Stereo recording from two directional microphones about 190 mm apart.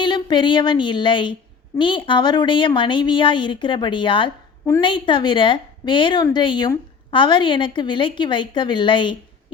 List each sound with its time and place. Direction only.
0.0 s a woman's voice: 25° left (ahead or behind)